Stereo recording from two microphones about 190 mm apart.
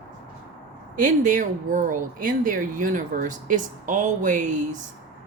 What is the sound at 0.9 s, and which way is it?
Speech, 40° right (ahead or behind).